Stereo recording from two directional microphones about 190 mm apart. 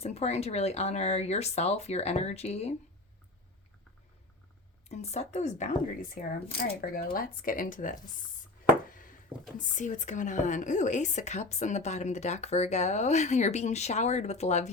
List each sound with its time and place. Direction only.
0.0 s speech: 35° left (ahead or behind)
4.9 s speech: 35° left (ahead or behind)
6.6 s speech: 50° left (ahead or behind)